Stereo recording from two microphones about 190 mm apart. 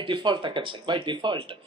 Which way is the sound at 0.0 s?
25° right (ahead or behind).